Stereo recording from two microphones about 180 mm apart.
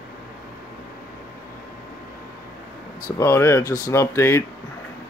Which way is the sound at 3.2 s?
15° left (ahead or behind).